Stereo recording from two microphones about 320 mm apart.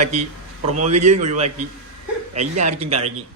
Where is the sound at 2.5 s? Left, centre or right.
Right.